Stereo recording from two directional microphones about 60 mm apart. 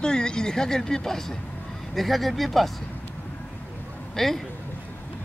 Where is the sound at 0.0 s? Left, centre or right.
Centre.